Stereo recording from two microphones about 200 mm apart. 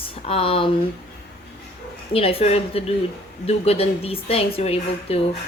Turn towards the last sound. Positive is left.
turn(degrees=30)  # may be behind; listen again after turning